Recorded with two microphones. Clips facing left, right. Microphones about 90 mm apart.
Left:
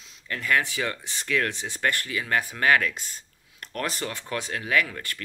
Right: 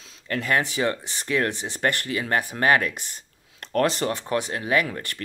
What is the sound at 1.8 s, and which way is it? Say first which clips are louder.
Speech: right 3 dB; 35° right (ahead or behind).